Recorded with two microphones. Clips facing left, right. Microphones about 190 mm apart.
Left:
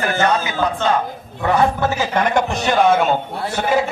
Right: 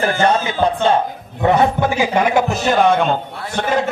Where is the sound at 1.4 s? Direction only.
20° right (ahead or behind).